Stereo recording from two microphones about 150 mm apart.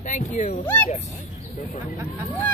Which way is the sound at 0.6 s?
15° left (ahead or behind).